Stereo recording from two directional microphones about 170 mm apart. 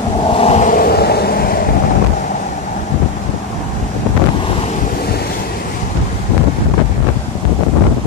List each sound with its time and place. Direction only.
0.4 s vehicle: 45° left (ahead or behind); by 1.6 s 60° left (ahead or behind)